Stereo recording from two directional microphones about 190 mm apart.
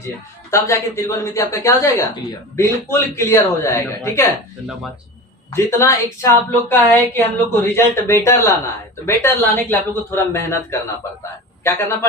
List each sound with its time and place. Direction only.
0.5 s a woman's voice: 15° left (ahead or behind)
5.5 s a woman's voice: 15° left (ahead or behind)